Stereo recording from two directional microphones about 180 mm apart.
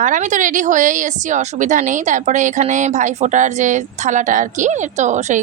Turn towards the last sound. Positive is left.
turn(degrees=-40)  # may be behind; listen again after turning